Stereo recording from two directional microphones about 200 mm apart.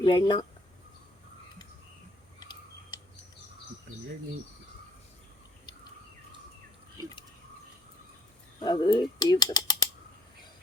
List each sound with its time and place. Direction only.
0.0 s speech: 25° left (ahead or behind)
2.4 s a sound: 20° left (ahead or behind)
8.6 s speech: 20° left (ahead or behind)